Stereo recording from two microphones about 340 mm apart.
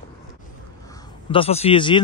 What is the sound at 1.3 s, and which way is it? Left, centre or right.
Speech, centre.